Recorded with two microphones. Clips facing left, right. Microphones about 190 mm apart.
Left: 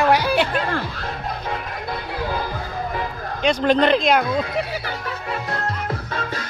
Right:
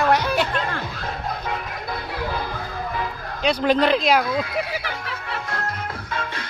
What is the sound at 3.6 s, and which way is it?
Speech, 5° right (ahead or behind).